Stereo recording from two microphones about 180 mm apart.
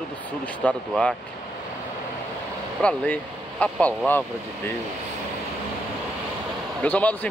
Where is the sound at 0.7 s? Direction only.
5° left (ahead or behind).